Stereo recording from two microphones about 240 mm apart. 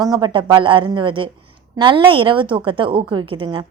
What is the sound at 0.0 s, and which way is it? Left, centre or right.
A woman's voice, centre.